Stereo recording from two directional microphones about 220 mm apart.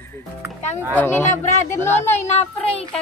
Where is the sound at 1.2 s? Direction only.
35° left (ahead or behind).